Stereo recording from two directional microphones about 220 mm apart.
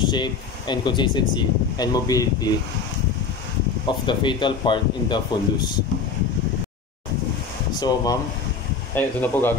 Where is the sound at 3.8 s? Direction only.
20° left (ahead or behind).